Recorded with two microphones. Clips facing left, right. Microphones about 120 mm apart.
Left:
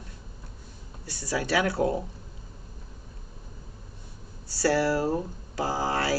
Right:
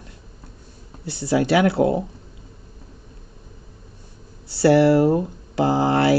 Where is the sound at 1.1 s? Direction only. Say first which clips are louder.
Right 10 dB; 25° right (ahead or behind).